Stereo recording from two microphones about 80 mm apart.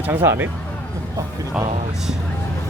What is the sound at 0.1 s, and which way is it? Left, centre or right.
Speech, right.